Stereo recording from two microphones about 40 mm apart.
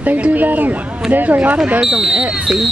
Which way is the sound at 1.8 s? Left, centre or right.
Centre.